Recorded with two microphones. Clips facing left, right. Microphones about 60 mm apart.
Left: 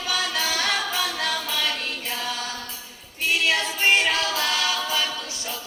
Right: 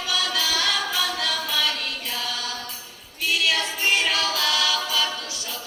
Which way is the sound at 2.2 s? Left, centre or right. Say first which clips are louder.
Even; left.